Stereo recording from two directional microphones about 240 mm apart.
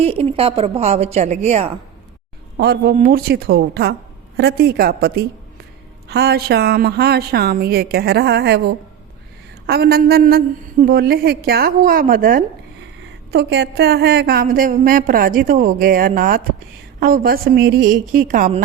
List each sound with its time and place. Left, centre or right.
0.0 s a woman's voice: right
2.6 s a woman's voice: right